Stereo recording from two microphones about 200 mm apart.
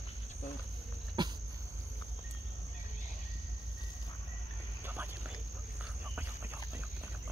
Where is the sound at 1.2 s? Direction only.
20° right (ahead or behind).